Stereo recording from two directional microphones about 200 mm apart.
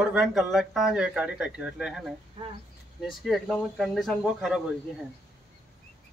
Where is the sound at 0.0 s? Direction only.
Centre (ahead or behind).